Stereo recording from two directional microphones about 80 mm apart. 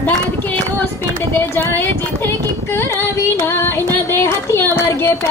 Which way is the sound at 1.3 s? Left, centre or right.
Left.